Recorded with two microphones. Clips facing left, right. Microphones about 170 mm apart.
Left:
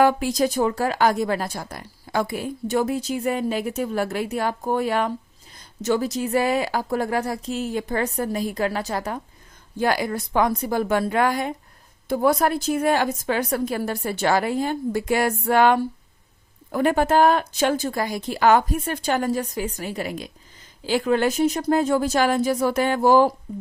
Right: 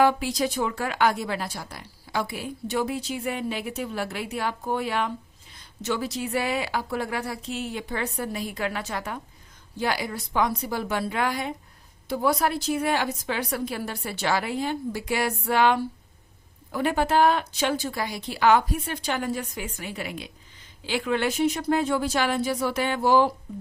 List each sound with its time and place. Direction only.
0.0 s speech: 45° left (ahead or behind)
9.7 s speech: 50° left (ahead or behind)